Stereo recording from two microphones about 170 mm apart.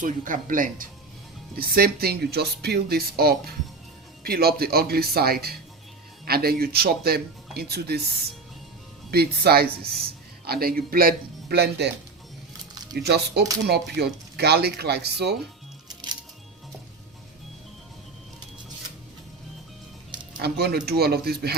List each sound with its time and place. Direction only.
0.0 s speech: 50° right (ahead or behind); by 8.0 s 70° right (ahead or behind)
9.0 s speech: 65° right (ahead or behind)
13.0 s speech: 75° right (ahead or behind)
15.9 s music: 25° right (ahead or behind)
20.3 s speech: 65° right (ahead or behind)